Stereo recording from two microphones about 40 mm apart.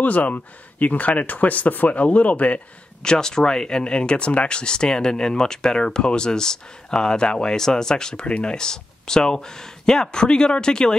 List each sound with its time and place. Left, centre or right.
0.0 s speech: left
3.0 s speech: centre